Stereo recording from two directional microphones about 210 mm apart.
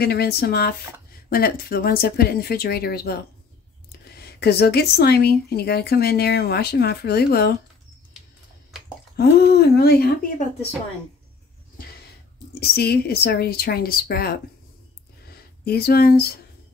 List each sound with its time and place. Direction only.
0.0 s speech: 50° left (ahead or behind)
9.1 s speech: 50° left (ahead or behind)
12.5 s speech: 50° left (ahead or behind)
15.6 s speech: 50° left (ahead or behind)